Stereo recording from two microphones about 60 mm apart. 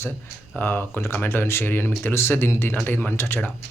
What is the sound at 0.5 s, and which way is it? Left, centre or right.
Speech, left.